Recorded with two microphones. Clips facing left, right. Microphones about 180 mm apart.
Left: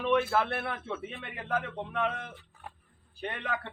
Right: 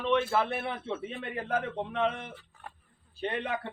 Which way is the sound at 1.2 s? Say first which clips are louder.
Right 2 dB; 40° right (ahead or behind).